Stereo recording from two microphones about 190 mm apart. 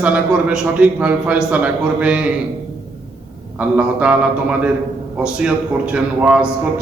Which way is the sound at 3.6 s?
5° right (ahead or behind).